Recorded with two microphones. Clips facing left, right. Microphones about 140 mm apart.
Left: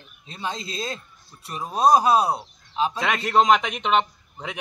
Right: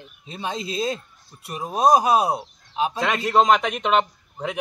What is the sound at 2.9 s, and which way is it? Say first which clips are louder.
A man's voice: right 2 dB; centre (ahead or behind).